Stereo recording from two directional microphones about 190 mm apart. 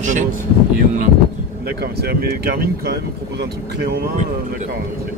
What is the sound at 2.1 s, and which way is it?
Speech, 55° right (ahead or behind).